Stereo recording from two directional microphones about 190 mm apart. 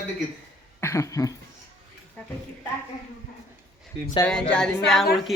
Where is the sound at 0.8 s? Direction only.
15° left (ahead or behind).